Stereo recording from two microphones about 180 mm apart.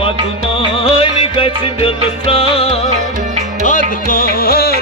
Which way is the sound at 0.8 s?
30° left (ahead or behind).